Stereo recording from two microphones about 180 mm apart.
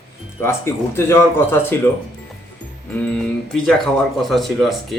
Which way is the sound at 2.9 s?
10° left (ahead or behind).